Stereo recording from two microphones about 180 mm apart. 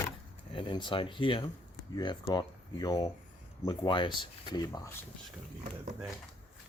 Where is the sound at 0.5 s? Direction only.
25° left (ahead or behind).